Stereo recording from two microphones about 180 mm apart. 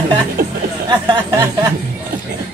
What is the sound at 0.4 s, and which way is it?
Speech, 55° right (ahead or behind).